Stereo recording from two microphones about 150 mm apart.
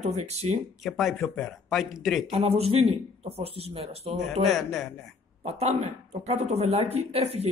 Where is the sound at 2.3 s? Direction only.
40° right (ahead or behind).